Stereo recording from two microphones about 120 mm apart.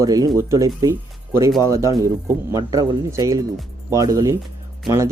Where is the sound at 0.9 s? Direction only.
25° right (ahead or behind).